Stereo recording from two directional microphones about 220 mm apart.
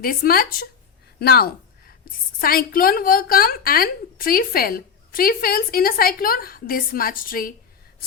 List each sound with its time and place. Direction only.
0.0 s speech: 40° left (ahead or behind)
1.2 s a sound: 45° left (ahead or behind)
2.4 s a woman's voice: 40° left (ahead or behind)